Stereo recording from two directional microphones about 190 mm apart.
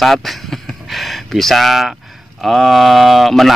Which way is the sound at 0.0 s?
Centre (ahead or behind).